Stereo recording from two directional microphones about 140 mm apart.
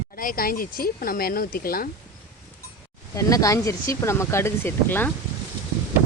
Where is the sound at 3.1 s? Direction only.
25° left (ahead or behind).